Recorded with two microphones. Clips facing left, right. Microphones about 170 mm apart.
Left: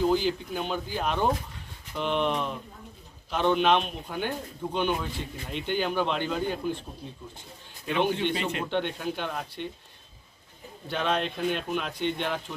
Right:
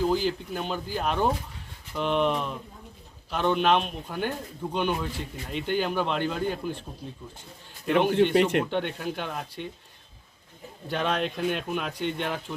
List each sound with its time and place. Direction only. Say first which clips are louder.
0.0 s a man's voice: left 1 dB; centre (ahead or behind)
8.3 s speech: right 8 dB; 65° right (ahead or behind)
8.7 s a man's voice: even; centre (ahead or behind)
10.8 s a man's voice: right 1 dB; 5° right (ahead or behind)